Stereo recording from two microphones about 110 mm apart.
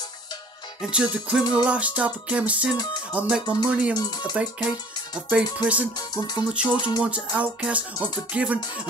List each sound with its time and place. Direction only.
0.7 s speech: 10° right (ahead or behind)
2.7 s speech: 45° left (ahead or behind)
3.1 s speech: 10° right (ahead or behind)
5.9 s speech: 40° left (ahead or behind)
7.0 s speech: 10° right (ahead or behind)